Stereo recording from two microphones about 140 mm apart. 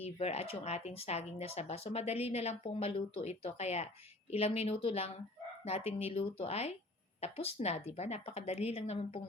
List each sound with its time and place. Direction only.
0.0 s speech: 45° left (ahead or behind)